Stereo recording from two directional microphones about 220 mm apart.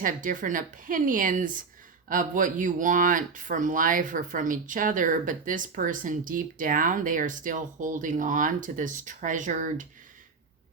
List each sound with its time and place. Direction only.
0.0 s speech: 35° right (ahead or behind)